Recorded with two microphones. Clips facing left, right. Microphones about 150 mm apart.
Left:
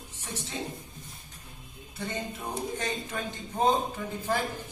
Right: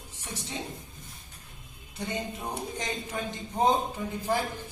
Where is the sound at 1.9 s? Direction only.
15° right (ahead or behind).